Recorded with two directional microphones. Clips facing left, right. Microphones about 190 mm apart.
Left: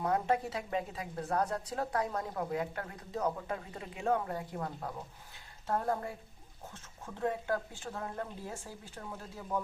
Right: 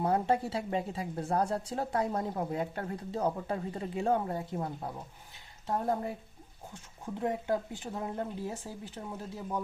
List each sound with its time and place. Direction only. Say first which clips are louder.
0.0 s speech: right 2 dB; 30° right (ahead or behind)